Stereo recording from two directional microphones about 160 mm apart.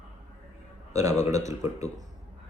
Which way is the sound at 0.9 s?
20° right (ahead or behind).